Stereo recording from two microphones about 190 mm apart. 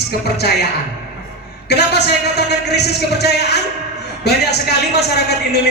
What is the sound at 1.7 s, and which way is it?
A man's voice, 60° left (ahead or behind).